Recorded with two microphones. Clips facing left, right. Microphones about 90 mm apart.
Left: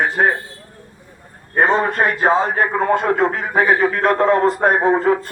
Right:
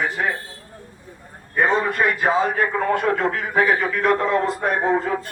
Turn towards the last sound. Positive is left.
turn(degrees=50)  # may be behind; listen again after turning